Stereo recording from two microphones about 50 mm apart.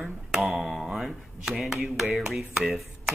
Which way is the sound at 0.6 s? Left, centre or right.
Centre.